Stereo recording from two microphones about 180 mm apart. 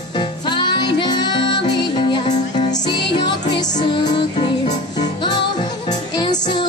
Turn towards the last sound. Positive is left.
turn(degrees=25)  # may be behind; listen again after turning